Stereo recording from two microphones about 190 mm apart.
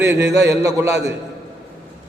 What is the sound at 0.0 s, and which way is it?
Speech, 65° right (ahead or behind).